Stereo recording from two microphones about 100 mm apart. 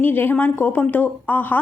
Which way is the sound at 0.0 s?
20° left (ahead or behind).